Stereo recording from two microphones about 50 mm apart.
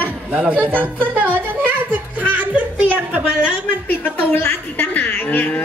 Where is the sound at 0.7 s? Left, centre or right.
Right.